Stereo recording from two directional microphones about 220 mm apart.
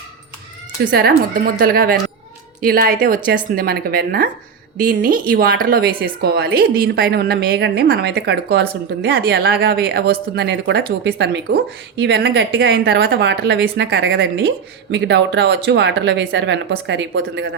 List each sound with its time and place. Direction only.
0.9 s a woman's voice: 45° right (ahead or behind)